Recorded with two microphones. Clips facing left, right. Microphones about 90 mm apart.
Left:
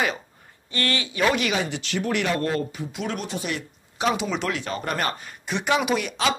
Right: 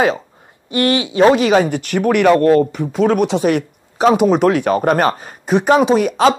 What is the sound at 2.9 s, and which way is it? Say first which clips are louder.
Speech: right 15 dB; 45° right (ahead or behind).